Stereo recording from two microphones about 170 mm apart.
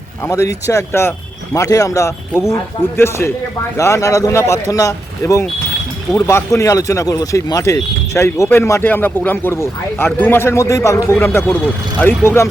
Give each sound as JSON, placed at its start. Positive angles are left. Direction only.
{"t": 0.3, "sound": "speech", "side_deg": 20}